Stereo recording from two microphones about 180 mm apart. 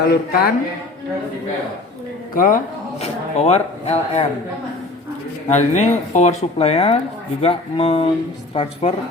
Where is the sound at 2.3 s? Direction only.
50° left (ahead or behind).